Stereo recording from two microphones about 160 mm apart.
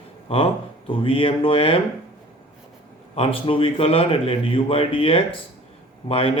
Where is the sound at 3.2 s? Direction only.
35° left (ahead or behind).